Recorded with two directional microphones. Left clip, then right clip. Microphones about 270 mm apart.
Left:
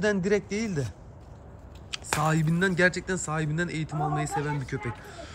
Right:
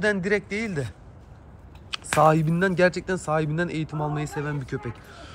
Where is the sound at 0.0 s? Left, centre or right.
Centre.